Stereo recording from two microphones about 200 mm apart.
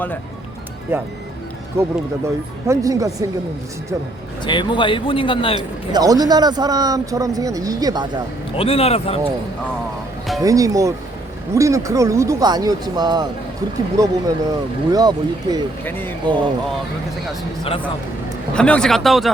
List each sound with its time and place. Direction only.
0.9 s speech: 10° right (ahead or behind)
4.4 s a man's voice: 25° left (ahead or behind)
5.5 s a man's voice: 20° right (ahead or behind)
8.5 s a man's voice: 30° left (ahead or behind)
10.4 s a man's voice: 15° right (ahead or behind)
15.8 s speech: 10° left (ahead or behind)
16.2 s a man's voice: 25° right (ahead or behind)
18.5 s speech: 5° left (ahead or behind)